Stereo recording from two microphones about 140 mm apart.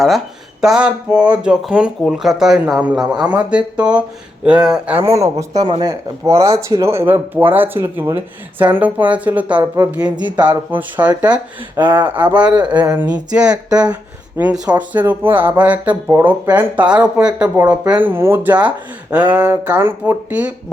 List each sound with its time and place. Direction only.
0.6 s speech: 5° right (ahead or behind)
5.0 s speech: 20° right (ahead or behind)
10.2 s speech: 30° right (ahead or behind)
10.7 s speech: 10° right (ahead or behind)
12.2 s speech: 10° right (ahead or behind)
12.5 s speech: 30° right (ahead or behind)
13.0 s speech: 10° right (ahead or behind)
13.5 s speech: 25° right (ahead or behind)
13.9 s a sound: 10° right (ahead or behind)
14.5 s speech: 25° right (ahead or behind)
14.8 s speech: 15° right (ahead or behind)